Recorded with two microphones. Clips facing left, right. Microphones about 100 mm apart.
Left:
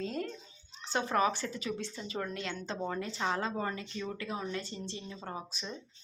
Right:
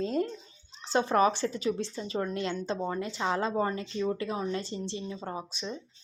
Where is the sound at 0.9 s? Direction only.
30° right (ahead or behind).